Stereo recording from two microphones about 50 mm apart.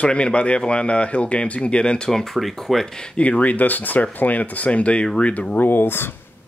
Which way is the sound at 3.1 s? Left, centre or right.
Left.